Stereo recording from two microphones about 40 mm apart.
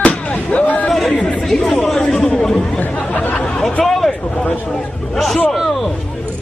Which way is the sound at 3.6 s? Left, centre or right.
Centre.